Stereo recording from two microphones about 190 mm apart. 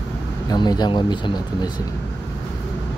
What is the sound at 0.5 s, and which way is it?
Speech, 20° left (ahead or behind).